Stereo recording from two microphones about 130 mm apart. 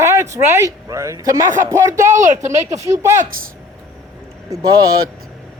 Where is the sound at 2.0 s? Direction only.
75° right (ahead or behind).